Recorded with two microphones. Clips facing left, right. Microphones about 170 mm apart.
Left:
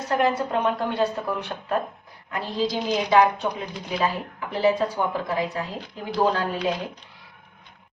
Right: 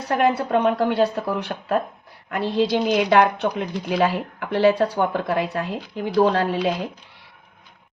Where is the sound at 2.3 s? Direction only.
65° right (ahead or behind).